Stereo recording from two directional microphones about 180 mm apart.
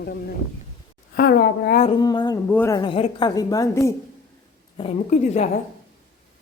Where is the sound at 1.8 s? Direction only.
25° left (ahead or behind).